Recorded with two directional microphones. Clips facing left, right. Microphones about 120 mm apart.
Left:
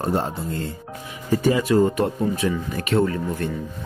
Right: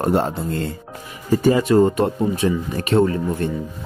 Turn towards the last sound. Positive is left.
turn(degrees=-30)  # may be behind; listen again after turning